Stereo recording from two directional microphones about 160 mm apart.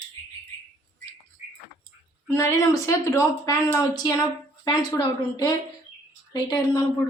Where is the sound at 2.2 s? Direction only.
15° left (ahead or behind).